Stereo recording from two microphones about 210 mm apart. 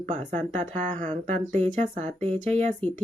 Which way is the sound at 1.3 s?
35° right (ahead or behind).